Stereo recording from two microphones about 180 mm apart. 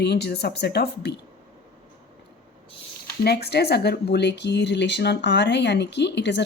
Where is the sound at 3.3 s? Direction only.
65° left (ahead or behind).